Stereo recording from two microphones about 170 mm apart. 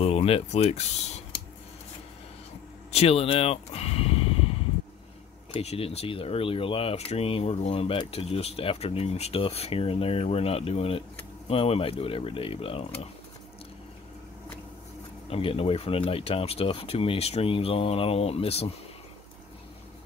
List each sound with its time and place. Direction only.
0.0 s speech: 35° left (ahead or behind)
2.9 s speech: 35° left (ahead or behind)
5.5 s speech: 35° left (ahead or behind)
15.2 s speech: 35° left (ahead or behind)